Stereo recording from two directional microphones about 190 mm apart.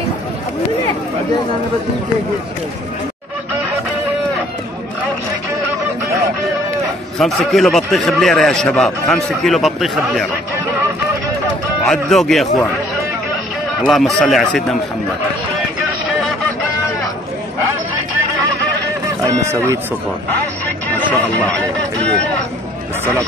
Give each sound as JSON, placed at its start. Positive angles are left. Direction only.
{"t": 7.2, "sound": "a man's voice", "side_deg": 0}
{"t": 11.8, "sound": "a man's voice", "side_deg": 0}
{"t": 13.8, "sound": "a man's voice", "side_deg": 0}
{"t": 19.2, "sound": "speech", "side_deg": -15}
{"t": 20.9, "sound": "speech", "side_deg": 10}